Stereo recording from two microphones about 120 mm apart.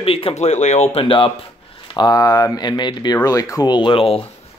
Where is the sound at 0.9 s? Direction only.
50° left (ahead or behind).